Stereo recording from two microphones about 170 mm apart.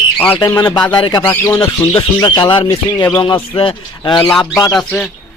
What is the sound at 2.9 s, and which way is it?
Speech, 10° left (ahead or behind).